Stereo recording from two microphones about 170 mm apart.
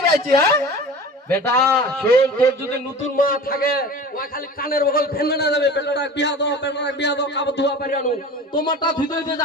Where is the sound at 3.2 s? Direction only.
55° left (ahead or behind); by 7.8 s 90° left.